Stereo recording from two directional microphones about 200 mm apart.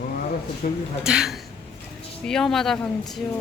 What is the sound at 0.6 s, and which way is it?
Speech, 45° left (ahead or behind).